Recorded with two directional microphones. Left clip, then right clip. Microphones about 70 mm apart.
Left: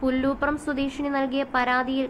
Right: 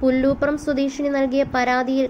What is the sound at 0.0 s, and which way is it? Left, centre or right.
A woman's voice, right.